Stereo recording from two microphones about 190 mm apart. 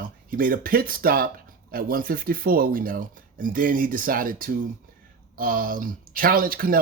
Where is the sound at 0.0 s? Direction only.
45° right (ahead or behind).